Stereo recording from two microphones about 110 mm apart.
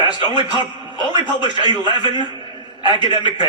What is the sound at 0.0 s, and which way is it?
A man's voice, 45° left (ahead or behind).